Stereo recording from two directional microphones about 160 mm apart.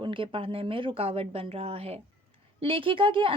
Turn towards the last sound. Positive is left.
turn(degrees=-35)  # may be behind; listen again after turning